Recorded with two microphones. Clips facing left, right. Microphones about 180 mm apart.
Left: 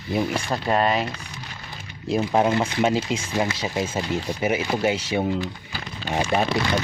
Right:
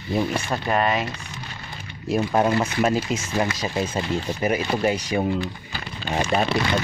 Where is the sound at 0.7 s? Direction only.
30° left (ahead or behind).